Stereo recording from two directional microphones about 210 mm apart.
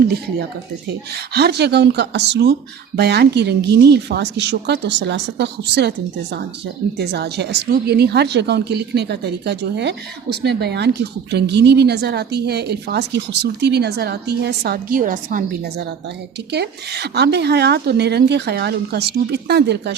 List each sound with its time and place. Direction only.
0.9 s a woman's voice: 50° right (ahead or behind)
6.9 s a woman's voice: 50° right (ahead or behind)